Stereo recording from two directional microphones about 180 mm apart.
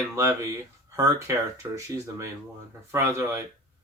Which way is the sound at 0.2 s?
15° right (ahead or behind).